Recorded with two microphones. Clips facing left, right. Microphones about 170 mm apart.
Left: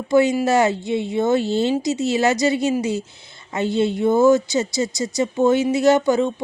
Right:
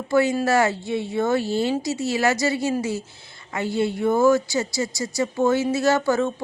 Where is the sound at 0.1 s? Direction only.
20° left (ahead or behind).